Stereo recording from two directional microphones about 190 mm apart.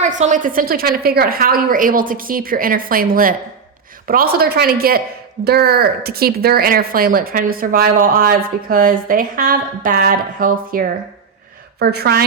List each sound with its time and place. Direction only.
0.0 s a woman's voice: 40° right (ahead or behind); by 12.2 s 55° right (ahead or behind)